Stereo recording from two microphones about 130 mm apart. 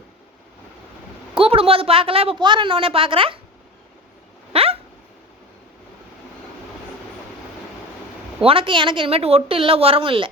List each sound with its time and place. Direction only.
1.4 s a woman's voice: 45° right (ahead or behind)
4.5 s dog: 50° right (ahead or behind)
8.4 s a woman's voice: 45° right (ahead or behind)